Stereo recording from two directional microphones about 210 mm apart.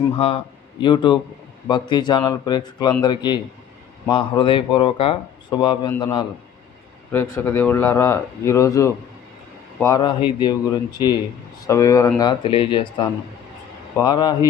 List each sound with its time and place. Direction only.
0.2 s speech: 25° left (ahead or behind)
7.1 s speech: 10° left (ahead or behind)